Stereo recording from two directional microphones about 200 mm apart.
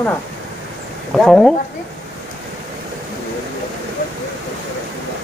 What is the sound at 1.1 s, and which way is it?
Speech, 5° left (ahead or behind).